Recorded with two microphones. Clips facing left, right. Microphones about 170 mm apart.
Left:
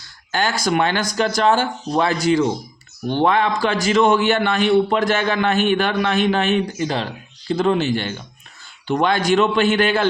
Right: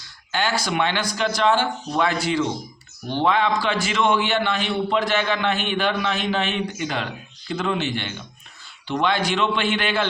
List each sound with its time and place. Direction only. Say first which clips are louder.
0.3 s a man's voice: left 4 dB; 45° left (ahead or behind)